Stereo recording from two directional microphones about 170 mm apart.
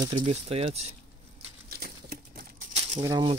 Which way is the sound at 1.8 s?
60° right (ahead or behind).